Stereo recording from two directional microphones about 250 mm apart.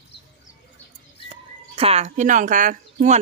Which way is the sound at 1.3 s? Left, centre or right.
Right.